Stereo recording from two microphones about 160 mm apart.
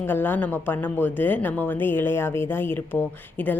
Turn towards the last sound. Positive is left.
turn(degrees=10)  # may be behind; listen again after turning